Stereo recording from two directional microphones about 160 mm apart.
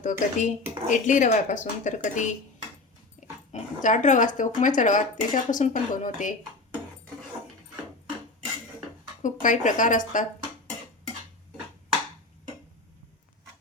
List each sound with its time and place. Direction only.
0.0 s speech: 50° left (ahead or behind)
9.2 s speech: 55° left (ahead or behind)